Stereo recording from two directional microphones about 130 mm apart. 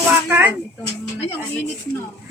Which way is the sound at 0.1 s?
15° right (ahead or behind).